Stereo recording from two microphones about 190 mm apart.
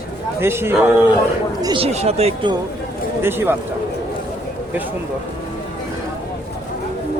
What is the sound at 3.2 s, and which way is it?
Speech, 10° right (ahead or behind).